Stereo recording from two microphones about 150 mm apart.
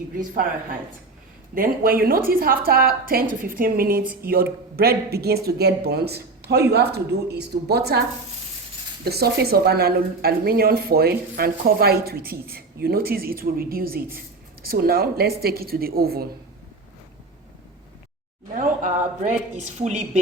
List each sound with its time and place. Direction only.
1.5 s a woman's voice: 75° right (ahead or behind); by 8.0 s 90° right
9.0 s a woman's voice: 90° right
18.5 s a woman's voice: 65° right (ahead or behind)